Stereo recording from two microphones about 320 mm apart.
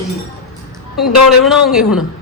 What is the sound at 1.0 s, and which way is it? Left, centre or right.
Speech, left.